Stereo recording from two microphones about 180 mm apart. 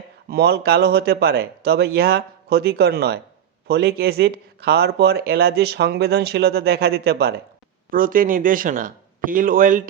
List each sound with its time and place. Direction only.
0.3 s speech: 60° right (ahead or behind)
7.9 s speech: 50° right (ahead or behind)